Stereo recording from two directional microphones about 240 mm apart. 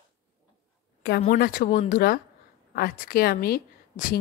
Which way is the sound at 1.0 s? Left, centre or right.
Left.